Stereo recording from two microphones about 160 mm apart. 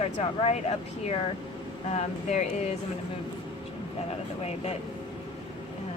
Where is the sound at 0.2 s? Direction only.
40° left (ahead or behind).